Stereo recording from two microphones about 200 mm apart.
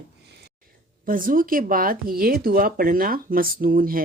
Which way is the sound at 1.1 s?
45° right (ahead or behind).